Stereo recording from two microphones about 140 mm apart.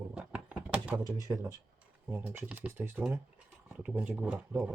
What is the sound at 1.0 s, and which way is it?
Speech, 25° right (ahead or behind).